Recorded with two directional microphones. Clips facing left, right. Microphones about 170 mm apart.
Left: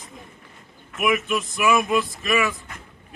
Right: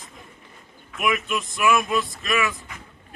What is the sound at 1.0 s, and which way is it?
A man's voice, 15° left (ahead or behind).